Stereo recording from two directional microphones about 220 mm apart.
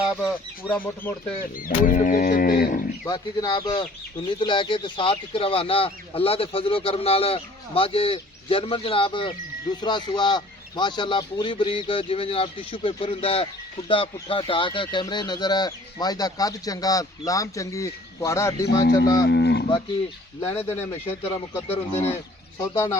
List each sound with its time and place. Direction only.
0.0 s speech: centre (ahead or behind)
1.5 s livestock: 40° left (ahead or behind)
3.1 s a man's voice: 20° left (ahead or behind)
19.3 s cattle: 50° left (ahead or behind)
20.7 s speech: 10° left (ahead or behind)
21.7 s a man's voice: 30° left (ahead or behind)